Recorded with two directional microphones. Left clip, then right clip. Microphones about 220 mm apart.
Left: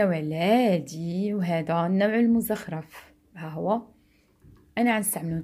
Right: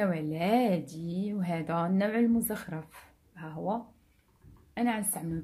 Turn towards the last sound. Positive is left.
turn(degrees=35)  # may be behind; listen again after turning